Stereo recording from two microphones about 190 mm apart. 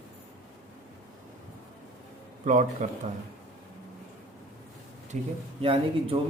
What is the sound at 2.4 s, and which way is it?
Speech, 40° right (ahead or behind).